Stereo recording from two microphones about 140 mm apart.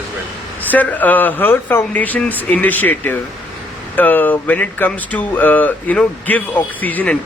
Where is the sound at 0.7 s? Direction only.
10° left (ahead or behind).